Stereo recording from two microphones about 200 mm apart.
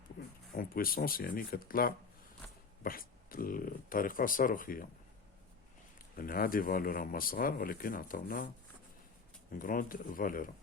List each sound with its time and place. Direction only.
0.5 s speech: 45° left (ahead or behind)
6.1 s speech: 45° left (ahead or behind)
9.6 s speech: 45° left (ahead or behind)